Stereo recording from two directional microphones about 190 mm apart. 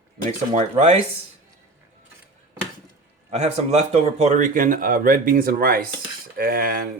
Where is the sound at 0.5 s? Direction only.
35° right (ahead or behind).